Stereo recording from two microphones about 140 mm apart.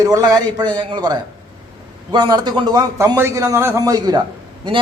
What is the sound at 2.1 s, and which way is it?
A man's voice, 30° right (ahead or behind).